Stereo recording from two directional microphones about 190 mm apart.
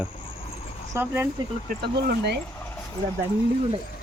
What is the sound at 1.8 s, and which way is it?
Speech, 60° right (ahead or behind).